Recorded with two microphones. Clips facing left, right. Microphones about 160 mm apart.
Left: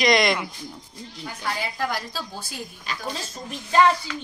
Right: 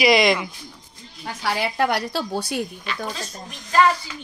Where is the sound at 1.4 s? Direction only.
75° right (ahead or behind).